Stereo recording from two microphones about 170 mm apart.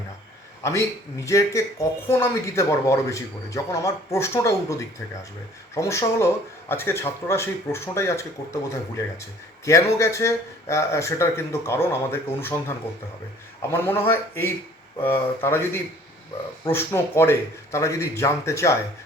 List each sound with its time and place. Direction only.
1.2 s speech: 15° left (ahead or behind)
9.6 s speech: 15° left (ahead or behind)